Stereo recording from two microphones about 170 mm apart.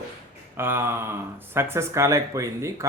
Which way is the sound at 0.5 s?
15° right (ahead or behind).